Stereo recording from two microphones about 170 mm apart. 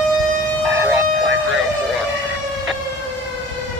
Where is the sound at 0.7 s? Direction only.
5° right (ahead or behind).